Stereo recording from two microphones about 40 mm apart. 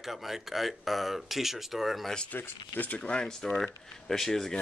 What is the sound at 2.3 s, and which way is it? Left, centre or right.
Speech, left.